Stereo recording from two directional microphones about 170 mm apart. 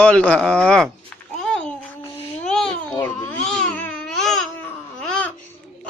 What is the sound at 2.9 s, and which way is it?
Babbling, 15° left (ahead or behind).